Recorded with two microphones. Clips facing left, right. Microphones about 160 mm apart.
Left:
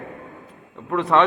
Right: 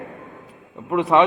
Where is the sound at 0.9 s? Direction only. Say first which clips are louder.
Right 2 dB; 10° right (ahead or behind).